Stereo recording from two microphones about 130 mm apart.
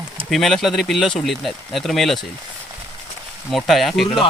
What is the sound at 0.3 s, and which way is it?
Speech, centre (ahead or behind).